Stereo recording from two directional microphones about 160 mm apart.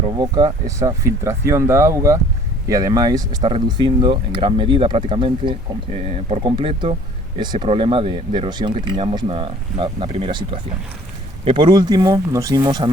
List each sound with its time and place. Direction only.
0.0 s speech: 25° right (ahead or behind)